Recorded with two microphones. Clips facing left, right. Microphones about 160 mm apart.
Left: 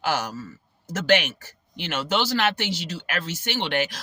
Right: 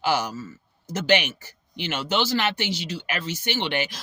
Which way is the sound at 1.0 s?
45° left (ahead or behind).